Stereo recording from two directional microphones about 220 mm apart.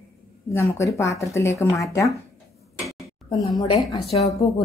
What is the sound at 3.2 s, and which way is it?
Speech, 15° left (ahead or behind).